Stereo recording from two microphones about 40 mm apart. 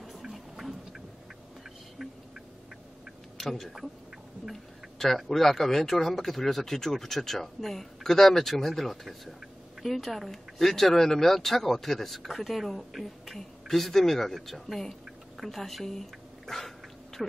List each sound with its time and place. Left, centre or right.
0.2 s music: centre
3.4 s speech: centre
4.9 s speech: centre